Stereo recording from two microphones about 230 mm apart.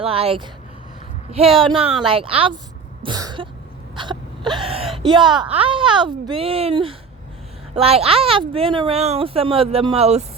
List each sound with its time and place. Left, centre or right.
0.0 s speech: right